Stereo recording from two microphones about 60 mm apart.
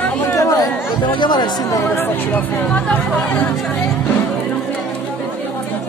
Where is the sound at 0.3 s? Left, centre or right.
Left.